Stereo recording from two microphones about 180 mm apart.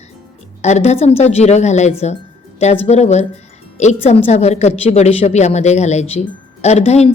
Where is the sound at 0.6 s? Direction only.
40° left (ahead or behind).